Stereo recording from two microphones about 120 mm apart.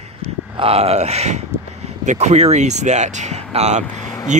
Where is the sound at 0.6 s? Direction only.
55° right (ahead or behind).